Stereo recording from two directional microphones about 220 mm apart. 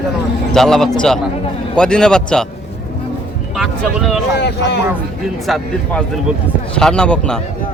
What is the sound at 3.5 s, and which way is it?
Speech, centre (ahead or behind).